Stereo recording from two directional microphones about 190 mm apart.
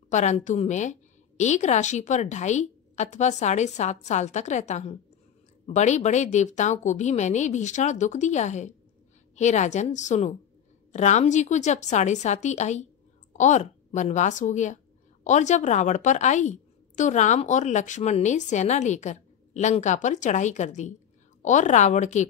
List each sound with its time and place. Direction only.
0.1 s a woman's voice: 40° left (ahead or behind)